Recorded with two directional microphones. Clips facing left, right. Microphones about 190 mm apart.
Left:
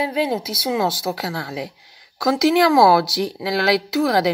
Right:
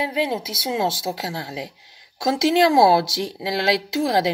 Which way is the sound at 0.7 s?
25° right (ahead or behind).